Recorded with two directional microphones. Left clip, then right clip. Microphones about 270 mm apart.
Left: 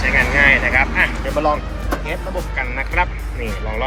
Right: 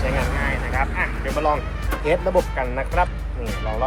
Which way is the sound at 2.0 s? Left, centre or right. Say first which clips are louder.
Right 6 dB; centre.